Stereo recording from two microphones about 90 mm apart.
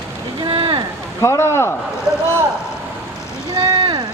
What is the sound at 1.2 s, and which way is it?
Speech, 30° left (ahead or behind).